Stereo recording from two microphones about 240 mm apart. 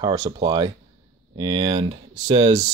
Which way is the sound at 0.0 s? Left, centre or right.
Centre.